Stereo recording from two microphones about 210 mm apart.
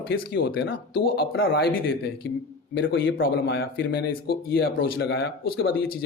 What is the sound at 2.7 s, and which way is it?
Speech, 60° left (ahead or behind).